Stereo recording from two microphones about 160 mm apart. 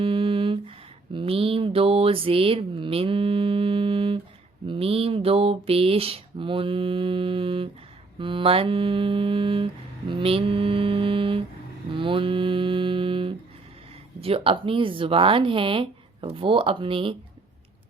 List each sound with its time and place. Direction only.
0.0 s a sound: 35° right (ahead or behind)
4.6 s mantra: 35° right (ahead or behind)
8.2 s speech: 30° right (ahead or behind)
10.1 s mantra: 35° right (ahead or behind)
14.2 s speech: 35° right (ahead or behind)